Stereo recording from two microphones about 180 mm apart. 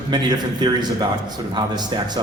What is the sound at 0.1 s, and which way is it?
Speech, 25° right (ahead or behind).